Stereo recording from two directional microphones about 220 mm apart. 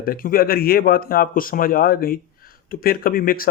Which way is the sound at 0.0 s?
40° left (ahead or behind).